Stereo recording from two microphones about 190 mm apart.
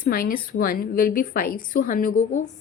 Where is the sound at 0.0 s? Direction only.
50° left (ahead or behind).